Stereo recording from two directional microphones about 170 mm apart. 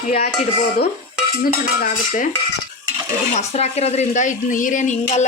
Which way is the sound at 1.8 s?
50° left (ahead or behind).